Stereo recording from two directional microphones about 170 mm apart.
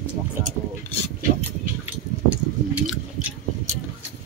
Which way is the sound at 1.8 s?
10° right (ahead or behind).